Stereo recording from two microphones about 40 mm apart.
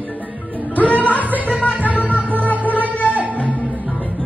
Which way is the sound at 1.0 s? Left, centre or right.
Left.